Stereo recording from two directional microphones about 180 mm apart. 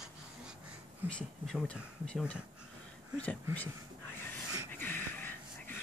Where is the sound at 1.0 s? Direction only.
5° left (ahead or behind).